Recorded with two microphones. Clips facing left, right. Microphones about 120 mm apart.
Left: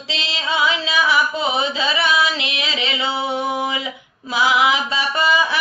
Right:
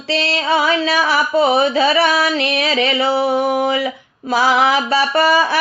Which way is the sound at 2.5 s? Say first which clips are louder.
Right 8 dB; 55° right (ahead or behind).